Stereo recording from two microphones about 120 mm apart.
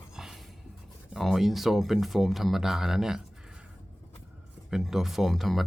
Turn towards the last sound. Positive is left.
turn(degrees=0)  # may be behind; listen again after turning